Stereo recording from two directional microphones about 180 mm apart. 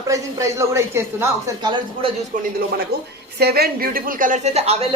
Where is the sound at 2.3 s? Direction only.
55° right (ahead or behind); by 4.9 s 35° right (ahead or behind).